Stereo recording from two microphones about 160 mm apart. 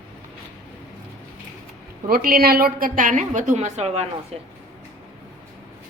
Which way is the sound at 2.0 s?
65° right (ahead or behind).